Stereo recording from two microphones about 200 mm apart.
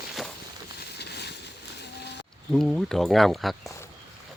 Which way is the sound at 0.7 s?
55° left (ahead or behind).